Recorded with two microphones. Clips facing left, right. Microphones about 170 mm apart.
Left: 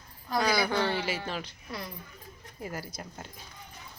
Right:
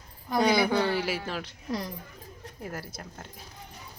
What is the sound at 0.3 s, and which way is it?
Speech, 20° right (ahead or behind).